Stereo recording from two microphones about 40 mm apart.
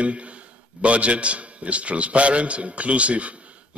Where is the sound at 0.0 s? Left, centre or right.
Right.